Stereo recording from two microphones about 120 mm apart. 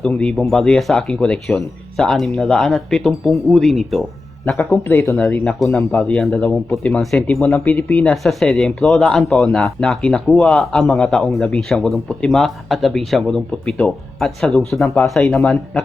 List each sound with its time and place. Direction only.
0.0 s speech: 10° left (ahead or behind)
4.4 s speech: 20° left (ahead or behind); by 7.4 s centre (ahead or behind)
7.4 s speech: 15° left (ahead or behind)
8.1 s speech: centre (ahead or behind)